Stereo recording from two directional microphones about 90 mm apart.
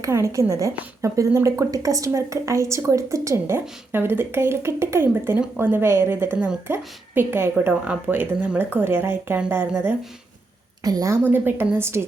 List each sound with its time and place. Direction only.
0.0 s a woman's voice: 35° right (ahead or behind)
6.3 s a woman's voice: 15° right (ahead or behind)
10.8 s a woman's voice: 40° right (ahead or behind)
11.2 s a woman's voice: 25° right (ahead or behind)